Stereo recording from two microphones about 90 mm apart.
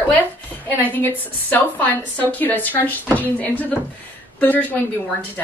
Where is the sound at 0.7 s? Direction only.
20° left (ahead or behind).